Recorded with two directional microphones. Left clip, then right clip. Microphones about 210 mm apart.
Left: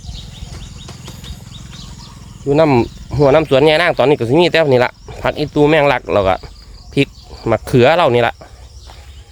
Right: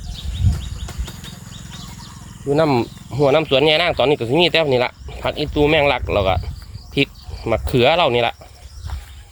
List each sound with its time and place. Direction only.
2.5 s speech: 35° left (ahead or behind)